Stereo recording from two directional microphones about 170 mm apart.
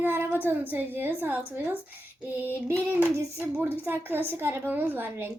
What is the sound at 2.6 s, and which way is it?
A woman's voice, 15° right (ahead or behind).